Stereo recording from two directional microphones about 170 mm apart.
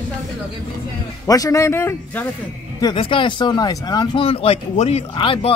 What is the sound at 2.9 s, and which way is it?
Speech, 30° left (ahead or behind).